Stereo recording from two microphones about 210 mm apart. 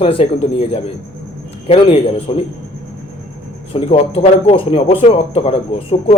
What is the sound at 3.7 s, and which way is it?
Speech, 30° left (ahead or behind).